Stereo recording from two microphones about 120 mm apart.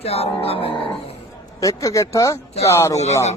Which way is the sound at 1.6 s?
25° left (ahead or behind).